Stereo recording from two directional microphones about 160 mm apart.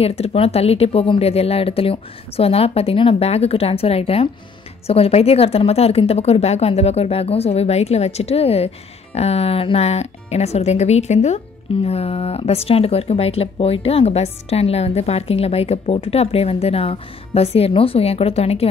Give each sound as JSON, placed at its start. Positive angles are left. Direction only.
{"t": 0.0, "sound": "a woman's voice", "side_deg": 40}